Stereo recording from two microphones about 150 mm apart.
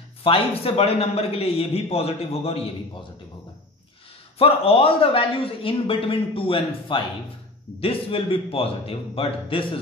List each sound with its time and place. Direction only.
0.2 s a man's voice: 40° left (ahead or behind)
4.4 s a man's voice: 40° left (ahead or behind)